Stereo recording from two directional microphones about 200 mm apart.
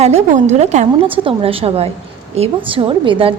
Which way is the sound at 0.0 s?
35° right (ahead or behind).